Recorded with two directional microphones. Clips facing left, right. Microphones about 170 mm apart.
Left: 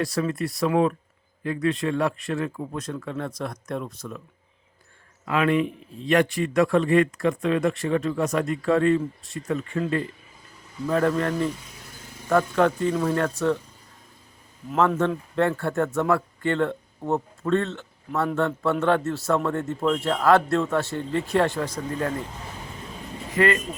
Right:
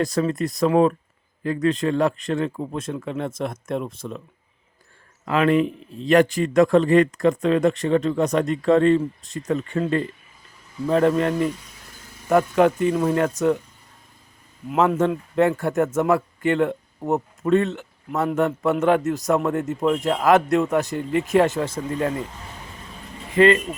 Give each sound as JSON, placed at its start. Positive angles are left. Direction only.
{"t": 0.2, "sound": "speech", "side_deg": -35}
{"t": 5.2, "sound": "speech", "side_deg": -40}
{"t": 10.8, "sound": "speech", "side_deg": -20}
{"t": 14.7, "sound": "speech", "side_deg": -15}
{"t": 23.4, "sound": "speech", "side_deg": -25}